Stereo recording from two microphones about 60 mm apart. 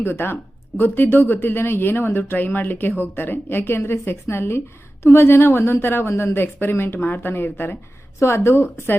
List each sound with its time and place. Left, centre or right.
0.0 s speech: left
8.2 s a woman's voice: left